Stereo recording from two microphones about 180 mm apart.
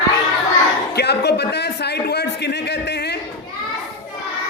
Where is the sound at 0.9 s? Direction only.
65° left (ahead or behind).